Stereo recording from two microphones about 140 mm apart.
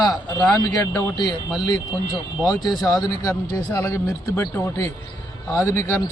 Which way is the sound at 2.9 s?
25° left (ahead or behind).